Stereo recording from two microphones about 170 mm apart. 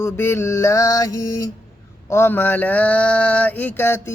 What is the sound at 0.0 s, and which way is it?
Mantra, 15° left (ahead or behind).